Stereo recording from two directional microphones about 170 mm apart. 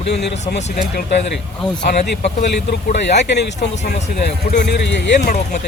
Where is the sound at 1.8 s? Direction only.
75° left (ahead or behind).